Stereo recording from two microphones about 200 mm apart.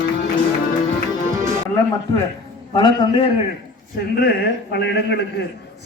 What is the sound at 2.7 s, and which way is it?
Speech, 20° left (ahead or behind).